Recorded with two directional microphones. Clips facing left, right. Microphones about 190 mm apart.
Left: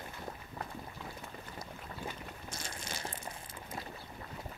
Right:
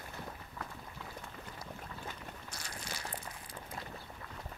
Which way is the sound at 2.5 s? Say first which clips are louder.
Left 3 dB; 25° left (ahead or behind).